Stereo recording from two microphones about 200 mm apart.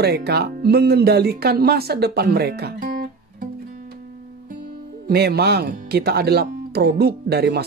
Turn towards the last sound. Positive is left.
turn(degrees=-55)  # may be behind; listen again after turning